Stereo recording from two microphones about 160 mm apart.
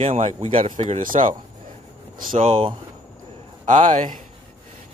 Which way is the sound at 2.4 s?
35° right (ahead or behind).